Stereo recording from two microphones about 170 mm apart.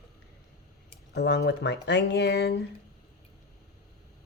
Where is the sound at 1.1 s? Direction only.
75° left (ahead or behind).